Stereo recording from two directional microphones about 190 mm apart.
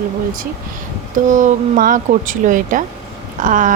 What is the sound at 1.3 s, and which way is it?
Speech, 40° right (ahead or behind).